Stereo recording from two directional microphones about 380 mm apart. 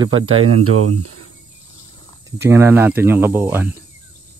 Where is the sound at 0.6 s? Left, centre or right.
Right.